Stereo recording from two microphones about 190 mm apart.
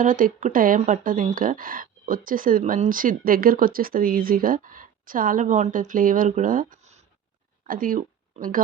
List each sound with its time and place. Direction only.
0.0 s speech: 45° right (ahead or behind)